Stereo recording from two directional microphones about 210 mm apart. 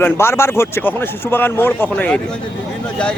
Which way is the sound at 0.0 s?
10° left (ahead or behind).